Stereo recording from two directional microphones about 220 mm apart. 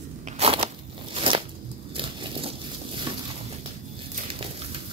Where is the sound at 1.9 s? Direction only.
25° right (ahead or behind).